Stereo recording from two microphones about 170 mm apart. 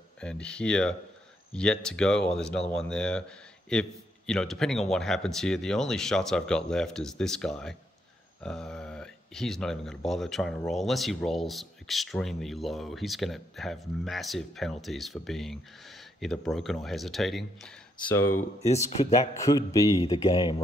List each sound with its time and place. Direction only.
0.2 s speech: 5° left (ahead or behind)
18.1 s speech: 15° left (ahead or behind)
18.7 s speech: 40° left (ahead or behind)
19.3 s a man's voice: 20° left (ahead or behind)